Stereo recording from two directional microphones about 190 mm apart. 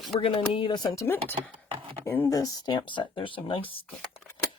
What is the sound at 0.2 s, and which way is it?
Speech, 25° left (ahead or behind).